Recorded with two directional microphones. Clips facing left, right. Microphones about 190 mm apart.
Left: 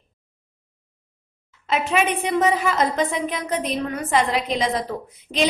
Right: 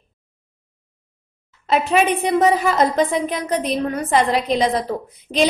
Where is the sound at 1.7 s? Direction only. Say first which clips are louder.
Right 4 dB; 35° right (ahead or behind).